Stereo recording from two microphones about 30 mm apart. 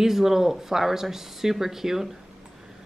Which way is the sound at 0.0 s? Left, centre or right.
Centre.